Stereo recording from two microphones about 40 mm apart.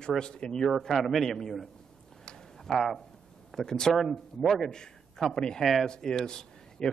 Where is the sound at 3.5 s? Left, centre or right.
Centre.